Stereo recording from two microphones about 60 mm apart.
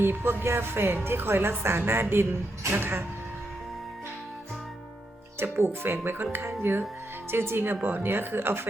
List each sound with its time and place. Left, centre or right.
0.0 s a woman's voice: right
5.4 s a woman's voice: right